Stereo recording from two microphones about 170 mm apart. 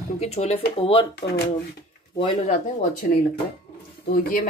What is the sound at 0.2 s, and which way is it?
Speech, 40° left (ahead or behind).